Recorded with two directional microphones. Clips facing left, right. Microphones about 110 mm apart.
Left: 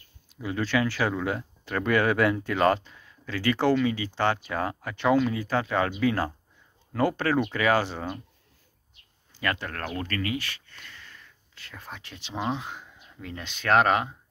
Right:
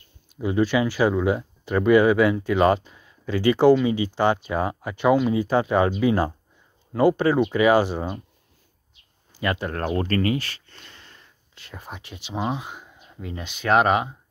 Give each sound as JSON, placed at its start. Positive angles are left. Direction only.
{"t": 0.4, "sound": "speech", "side_deg": -15}
{"t": 9.4, "sound": "speech", "side_deg": -15}